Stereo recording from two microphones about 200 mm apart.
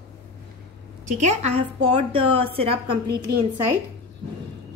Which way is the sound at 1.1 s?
35° right (ahead or behind).